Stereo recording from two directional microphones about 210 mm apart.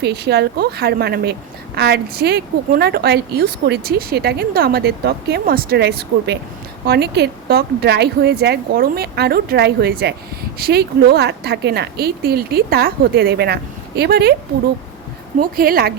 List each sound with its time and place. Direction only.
0.0 s a woman's voice: 50° right (ahead or behind)
15.4 s a woman's voice: 45° right (ahead or behind)